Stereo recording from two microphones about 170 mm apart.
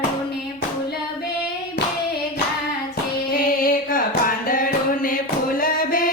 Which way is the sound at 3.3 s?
55° left (ahead or behind).